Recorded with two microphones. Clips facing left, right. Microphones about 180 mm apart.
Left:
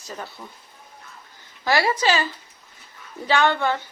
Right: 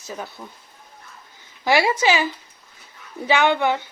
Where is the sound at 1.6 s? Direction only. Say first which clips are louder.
Right 2 dB; 20° right (ahead or behind).